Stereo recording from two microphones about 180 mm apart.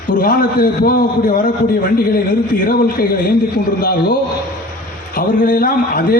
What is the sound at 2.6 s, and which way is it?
Speech, 55° left (ahead or behind).